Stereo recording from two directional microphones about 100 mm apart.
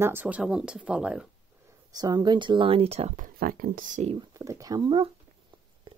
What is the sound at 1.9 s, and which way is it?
Speech, 45° right (ahead or behind).